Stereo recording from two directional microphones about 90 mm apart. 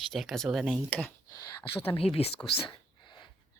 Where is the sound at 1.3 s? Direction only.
45° left (ahead or behind).